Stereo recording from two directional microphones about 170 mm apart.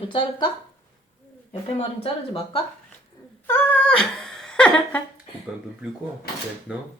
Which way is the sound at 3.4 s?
10° left (ahead or behind).